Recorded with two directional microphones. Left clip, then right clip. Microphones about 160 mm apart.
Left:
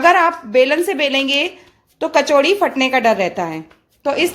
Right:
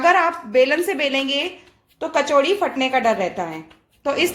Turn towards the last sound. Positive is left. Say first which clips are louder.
# left 3 dB
turn(degrees=25)  # may be behind; listen again after turning